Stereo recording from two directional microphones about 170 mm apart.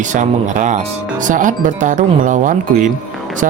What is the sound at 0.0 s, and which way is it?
Speech, 45° right (ahead or behind).